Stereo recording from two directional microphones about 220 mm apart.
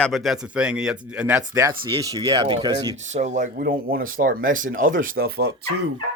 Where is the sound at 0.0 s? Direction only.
Centre (ahead or behind); by 2.9 s 20° right (ahead or behind).